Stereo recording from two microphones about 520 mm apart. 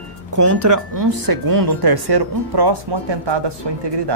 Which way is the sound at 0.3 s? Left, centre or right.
Right.